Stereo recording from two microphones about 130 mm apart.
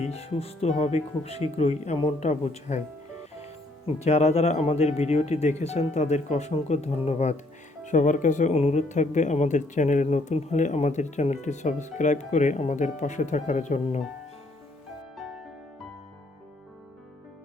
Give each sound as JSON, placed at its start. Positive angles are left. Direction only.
{"t": 0.0, "sound": "speech", "side_deg": 55}
{"t": 7.9, "sound": "speech", "side_deg": 75}